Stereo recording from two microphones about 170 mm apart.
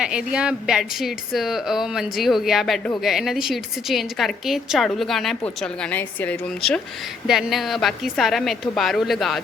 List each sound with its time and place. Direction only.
0.0 s a woman's voice: 5° right (ahead or behind)